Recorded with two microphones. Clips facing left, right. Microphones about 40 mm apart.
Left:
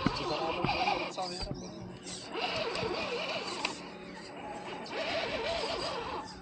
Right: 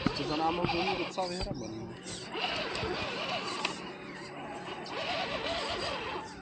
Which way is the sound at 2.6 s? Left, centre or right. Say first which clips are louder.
Left 1 dB; centre.